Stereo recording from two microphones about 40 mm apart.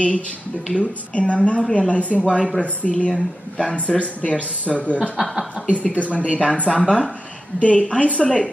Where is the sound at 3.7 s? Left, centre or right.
Left.